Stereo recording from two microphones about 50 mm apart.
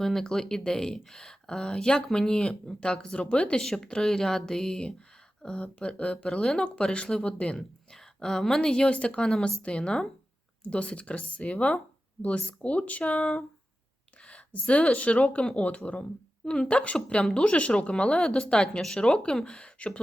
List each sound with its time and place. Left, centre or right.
0.0 s speech: centre; by 17.2 s left
17.2 s speech: centre
17.4 s speech: left